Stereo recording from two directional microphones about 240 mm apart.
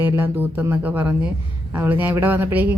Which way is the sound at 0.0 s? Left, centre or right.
Centre.